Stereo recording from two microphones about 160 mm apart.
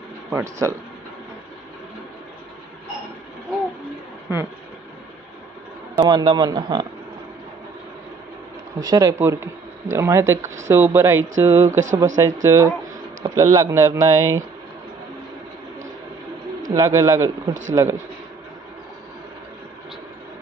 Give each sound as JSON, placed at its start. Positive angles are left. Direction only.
{"t": 0.3, "sound": "speech", "side_deg": -20}
{"t": 5.9, "sound": "a man's voice", "side_deg": -25}
{"t": 8.7, "sound": "a man's voice", "side_deg": -20}
{"t": 16.6, "sound": "a man's voice", "side_deg": -20}